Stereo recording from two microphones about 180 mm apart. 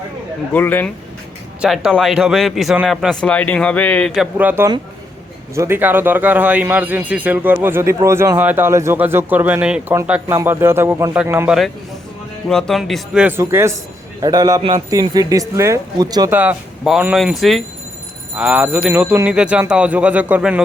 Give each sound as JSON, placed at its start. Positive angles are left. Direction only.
{"t": 0.5, "sound": "speech", "side_deg": 10}
{"t": 1.6, "sound": "speech", "side_deg": 0}
{"t": 12.5, "sound": "speech", "side_deg": 5}
{"t": 16.4, "sound": "speech", "side_deg": -5}